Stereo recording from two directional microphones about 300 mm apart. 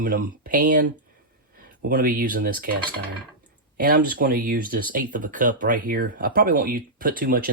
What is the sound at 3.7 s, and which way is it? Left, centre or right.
Speech, right.